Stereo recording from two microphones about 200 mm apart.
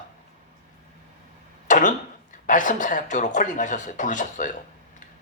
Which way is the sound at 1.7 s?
40° left (ahead or behind).